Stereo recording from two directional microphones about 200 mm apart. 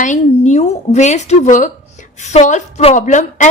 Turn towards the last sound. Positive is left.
turn(degrees=40)  # may be behind; listen again after turning